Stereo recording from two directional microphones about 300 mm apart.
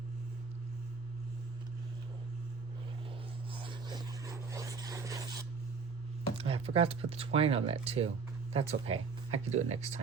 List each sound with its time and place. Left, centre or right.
3.6 s vehicle: centre
6.3 s speech: centre